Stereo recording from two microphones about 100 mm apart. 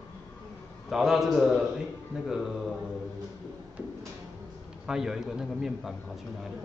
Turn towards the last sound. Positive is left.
turn(degrees=-5)  # may be behind; listen again after turning